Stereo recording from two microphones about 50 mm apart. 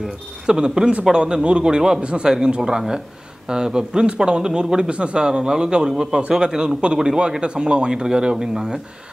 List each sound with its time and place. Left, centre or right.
0.0 s speech: centre